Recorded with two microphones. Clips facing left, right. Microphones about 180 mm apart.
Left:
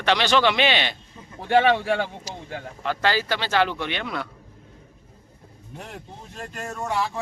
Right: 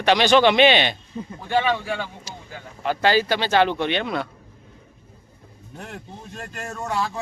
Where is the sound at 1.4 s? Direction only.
65° left (ahead or behind).